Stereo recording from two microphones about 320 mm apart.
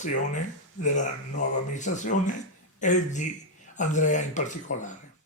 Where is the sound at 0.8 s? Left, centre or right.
Left.